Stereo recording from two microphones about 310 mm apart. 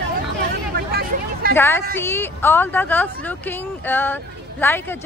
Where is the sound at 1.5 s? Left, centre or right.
Centre.